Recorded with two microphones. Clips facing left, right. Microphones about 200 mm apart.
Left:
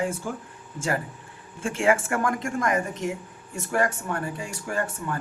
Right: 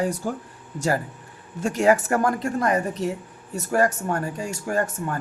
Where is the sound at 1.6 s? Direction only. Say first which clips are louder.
Right 4 dB; 40° right (ahead or behind).